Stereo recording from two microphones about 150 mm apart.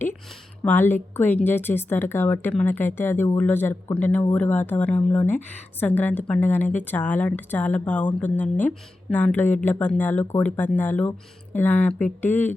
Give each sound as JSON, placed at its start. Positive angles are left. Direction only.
{"t": 0.6, "sound": "speech", "side_deg": 10}